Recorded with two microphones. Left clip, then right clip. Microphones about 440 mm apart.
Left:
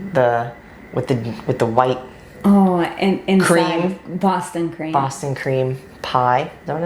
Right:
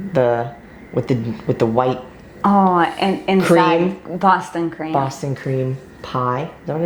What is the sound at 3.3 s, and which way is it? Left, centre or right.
Speech, left.